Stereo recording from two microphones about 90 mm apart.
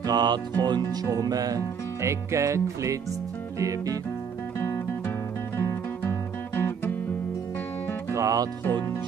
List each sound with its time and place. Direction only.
0.0 s music: 50° right (ahead or behind)
4.6 s music: 25° left (ahead or behind)
8.1 s music: 40° right (ahead or behind)
8.6 s speech: 25° left (ahead or behind)